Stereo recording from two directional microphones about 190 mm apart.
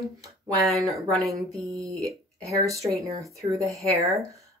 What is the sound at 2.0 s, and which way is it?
Speech, 15° right (ahead or behind).